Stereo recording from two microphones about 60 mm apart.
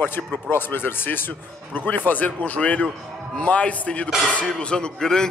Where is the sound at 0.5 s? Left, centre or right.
Left.